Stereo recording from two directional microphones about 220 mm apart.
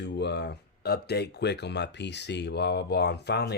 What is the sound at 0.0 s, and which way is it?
Speech, 50° left (ahead or behind).